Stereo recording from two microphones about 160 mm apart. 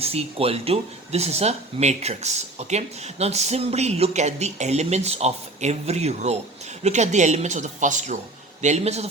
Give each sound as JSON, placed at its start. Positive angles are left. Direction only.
{"t": 0.0, "sound": "speech", "side_deg": -40}